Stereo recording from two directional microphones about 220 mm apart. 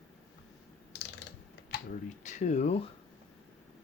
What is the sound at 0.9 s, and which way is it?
Mechanisms, 50° left (ahead or behind).